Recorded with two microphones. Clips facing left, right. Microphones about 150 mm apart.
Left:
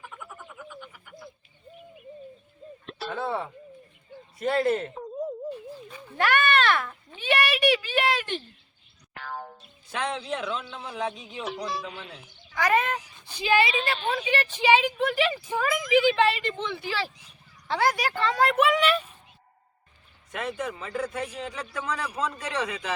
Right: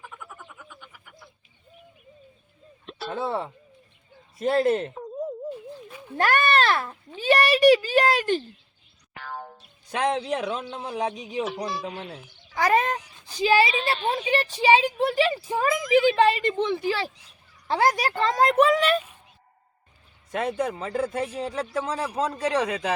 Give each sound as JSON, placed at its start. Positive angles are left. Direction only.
{"t": 0.0, "sound": "frog", "side_deg": 0}
{"t": 3.1, "sound": "speech", "side_deg": -30}
{"t": 4.4, "sound": "speech", "side_deg": -30}
{"t": 4.9, "sound": "a sound", "side_deg": 0}
{"t": 6.1, "sound": "speech", "side_deg": -40}
{"t": 9.1, "sound": "boing", "side_deg": 0}
{"t": 9.9, "sound": "speech", "side_deg": -40}
{"t": 11.1, "sound": "music", "side_deg": -20}
{"t": 11.4, "sound": "speech", "side_deg": 0}
{"t": 12.5, "sound": "a woman's voice", "side_deg": -35}
{"t": 20.3, "sound": "speech", "side_deg": -35}